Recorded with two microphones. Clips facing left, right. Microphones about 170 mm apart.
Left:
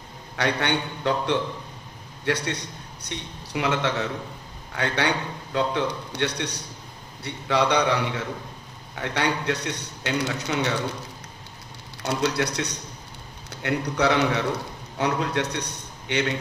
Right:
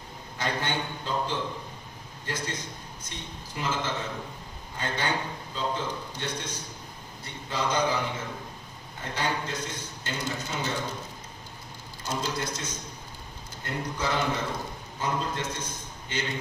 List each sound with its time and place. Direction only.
0.4 s a man's voice: 70° left (ahead or behind)
12.0 s a man's voice: 70° left (ahead or behind)